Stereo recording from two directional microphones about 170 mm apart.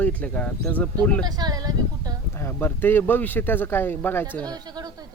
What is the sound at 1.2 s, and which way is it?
Speech, 25° right (ahead or behind).